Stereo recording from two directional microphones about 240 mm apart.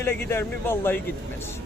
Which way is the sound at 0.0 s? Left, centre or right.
Centre.